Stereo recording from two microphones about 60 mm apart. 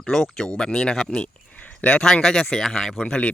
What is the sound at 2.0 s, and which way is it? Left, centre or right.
Speech, centre.